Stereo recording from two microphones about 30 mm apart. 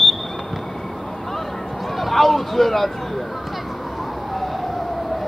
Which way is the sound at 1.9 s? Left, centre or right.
Centre.